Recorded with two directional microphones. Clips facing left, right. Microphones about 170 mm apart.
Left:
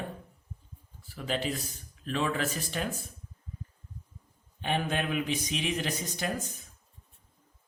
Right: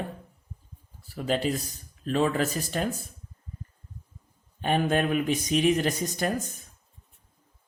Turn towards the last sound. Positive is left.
turn(degrees=-45)  # may be behind; listen again after turning